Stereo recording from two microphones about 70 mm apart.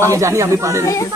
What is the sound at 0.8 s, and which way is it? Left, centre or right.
Speech, left.